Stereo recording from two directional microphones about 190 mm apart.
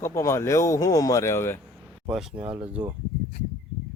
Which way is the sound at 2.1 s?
Centre (ahead or behind).